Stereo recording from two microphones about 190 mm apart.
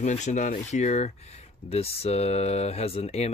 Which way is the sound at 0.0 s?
40° left (ahead or behind).